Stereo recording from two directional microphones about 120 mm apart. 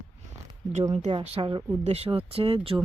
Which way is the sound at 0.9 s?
70° right (ahead or behind).